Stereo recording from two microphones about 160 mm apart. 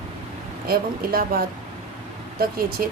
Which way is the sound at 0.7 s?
70° right (ahead or behind).